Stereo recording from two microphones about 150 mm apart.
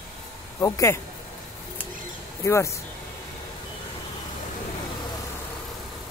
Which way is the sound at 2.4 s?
20° left (ahead or behind).